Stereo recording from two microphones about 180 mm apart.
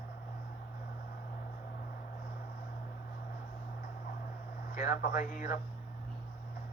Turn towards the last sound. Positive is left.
turn(degrees=50)  # may be behind; listen again after turning